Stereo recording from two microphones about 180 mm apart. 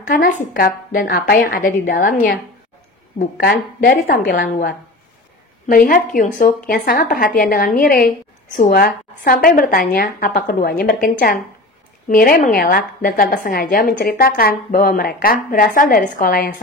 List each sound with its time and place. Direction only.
0.2 s a woman's voice: 55° left (ahead or behind)
3.3 s a woman's voice: 55° left (ahead or behind)
5.7 s a woman's voice: 50° left (ahead or behind)